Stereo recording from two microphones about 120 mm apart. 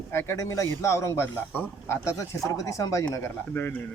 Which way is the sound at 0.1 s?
25° left (ahead or behind).